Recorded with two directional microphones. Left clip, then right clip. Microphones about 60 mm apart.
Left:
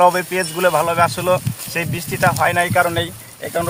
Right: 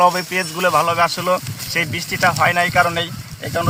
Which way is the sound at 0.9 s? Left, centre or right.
Left.